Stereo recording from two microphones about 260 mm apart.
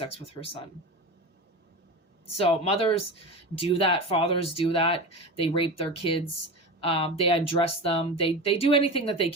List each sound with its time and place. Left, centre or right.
0.0 s speech: left
2.2 s speech: left